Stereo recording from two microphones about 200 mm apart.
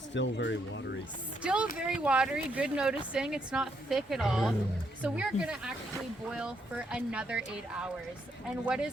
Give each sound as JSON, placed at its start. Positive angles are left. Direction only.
{"t": 0.1, "sound": "speech", "side_deg": 60}
{"t": 1.4, "sound": "speech", "side_deg": -5}